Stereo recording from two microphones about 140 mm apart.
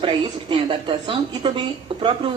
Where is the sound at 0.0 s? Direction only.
35° right (ahead or behind).